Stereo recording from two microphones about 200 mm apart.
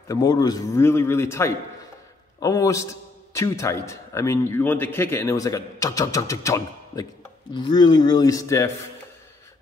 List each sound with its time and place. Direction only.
0.1 s a man's voice: 20° left (ahead or behind)